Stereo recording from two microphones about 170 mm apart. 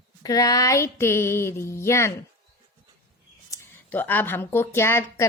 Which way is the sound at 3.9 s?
10° left (ahead or behind).